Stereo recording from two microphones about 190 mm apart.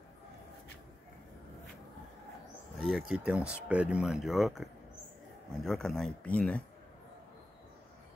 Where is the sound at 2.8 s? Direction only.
5° right (ahead or behind).